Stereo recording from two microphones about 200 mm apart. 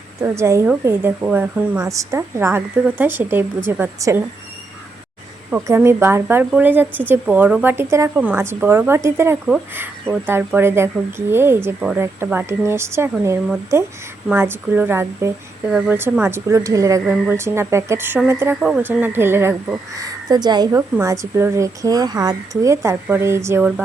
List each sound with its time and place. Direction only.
0.2 s speech: 15° right (ahead or behind)
5.5 s speech: 10° right (ahead or behind)